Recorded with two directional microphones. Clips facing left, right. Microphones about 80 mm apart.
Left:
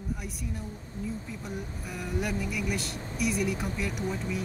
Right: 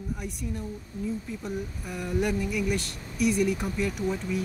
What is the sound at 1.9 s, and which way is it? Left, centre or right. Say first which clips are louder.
Speech: right 5 dB; centre.